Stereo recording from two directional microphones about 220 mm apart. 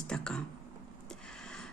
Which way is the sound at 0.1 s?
5° left (ahead or behind).